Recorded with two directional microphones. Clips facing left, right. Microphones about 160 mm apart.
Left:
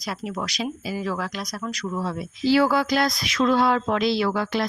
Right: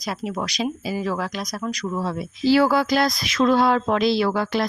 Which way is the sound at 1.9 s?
35° right (ahead or behind).